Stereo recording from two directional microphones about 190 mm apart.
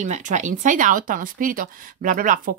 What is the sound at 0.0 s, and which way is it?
Speech, 40° right (ahead or behind).